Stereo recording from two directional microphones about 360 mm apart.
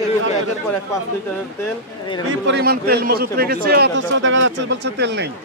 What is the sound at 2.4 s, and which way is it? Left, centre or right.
A man's voice, right.